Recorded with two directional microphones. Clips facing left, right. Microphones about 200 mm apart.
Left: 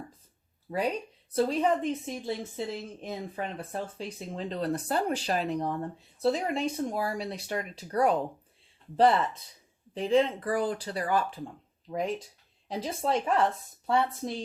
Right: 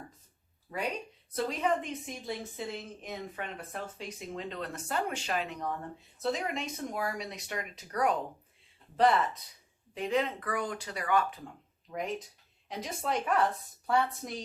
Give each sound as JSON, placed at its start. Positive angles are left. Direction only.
{"t": 0.7, "sound": "speech", "side_deg": 25}